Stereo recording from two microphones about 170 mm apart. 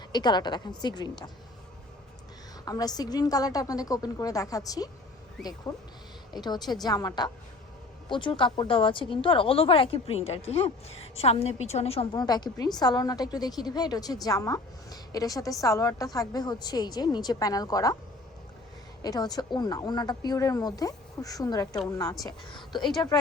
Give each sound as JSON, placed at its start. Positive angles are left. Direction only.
{"t": 0.1, "sound": "speech", "side_deg": 25}
{"t": 2.6, "sound": "speech", "side_deg": 20}
{"t": 19.0, "sound": "speech", "side_deg": 25}